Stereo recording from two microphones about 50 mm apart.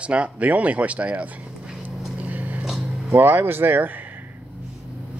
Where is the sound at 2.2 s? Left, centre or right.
Right.